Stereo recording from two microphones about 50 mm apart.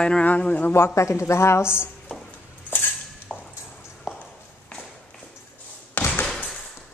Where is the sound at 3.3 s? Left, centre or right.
Centre.